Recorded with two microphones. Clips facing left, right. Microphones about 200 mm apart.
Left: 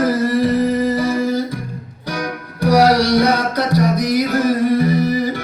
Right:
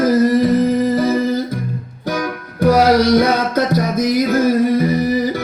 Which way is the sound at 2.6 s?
45° right (ahead or behind).